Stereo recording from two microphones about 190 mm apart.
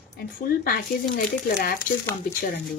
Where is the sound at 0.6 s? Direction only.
50° left (ahead or behind).